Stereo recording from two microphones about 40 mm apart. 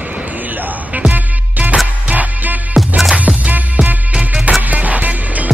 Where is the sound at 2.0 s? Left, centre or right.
Right.